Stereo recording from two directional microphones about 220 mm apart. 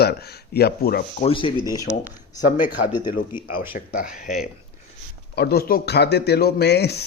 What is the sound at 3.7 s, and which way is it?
Speech, 40° left (ahead or behind).